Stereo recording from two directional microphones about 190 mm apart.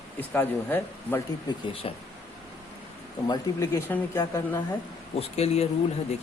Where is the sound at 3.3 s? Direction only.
15° left (ahead or behind).